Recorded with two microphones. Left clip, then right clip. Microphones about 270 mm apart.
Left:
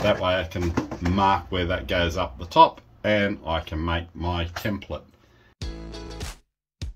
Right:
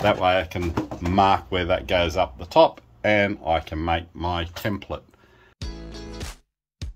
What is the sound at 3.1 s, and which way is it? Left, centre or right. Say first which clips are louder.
Speech: right 3 dB; right.